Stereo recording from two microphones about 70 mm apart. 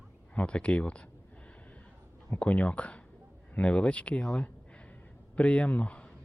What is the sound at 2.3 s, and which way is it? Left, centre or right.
Speech, centre.